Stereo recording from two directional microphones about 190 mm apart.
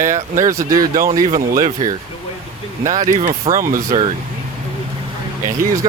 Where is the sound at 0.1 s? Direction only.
45° right (ahead or behind).